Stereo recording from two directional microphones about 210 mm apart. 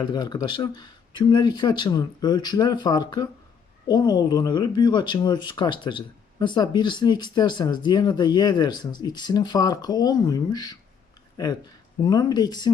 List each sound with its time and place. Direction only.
0.0 s speech: 20° left (ahead or behind)